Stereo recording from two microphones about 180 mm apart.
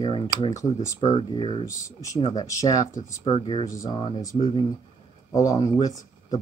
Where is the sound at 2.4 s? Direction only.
20° left (ahead or behind).